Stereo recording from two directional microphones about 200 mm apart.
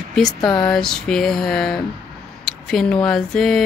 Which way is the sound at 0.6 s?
5° left (ahead or behind).